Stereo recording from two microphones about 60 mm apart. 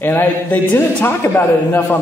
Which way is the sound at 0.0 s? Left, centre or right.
Left.